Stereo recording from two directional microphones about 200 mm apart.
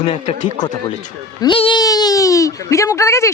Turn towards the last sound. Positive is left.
turn(degrees=15)  # may be behind; listen again after turning